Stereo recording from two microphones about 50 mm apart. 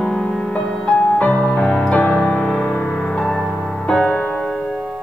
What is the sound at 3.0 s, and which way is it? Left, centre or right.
Music, centre.